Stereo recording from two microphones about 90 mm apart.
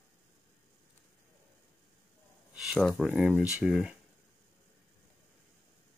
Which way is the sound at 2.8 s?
10° left (ahead or behind).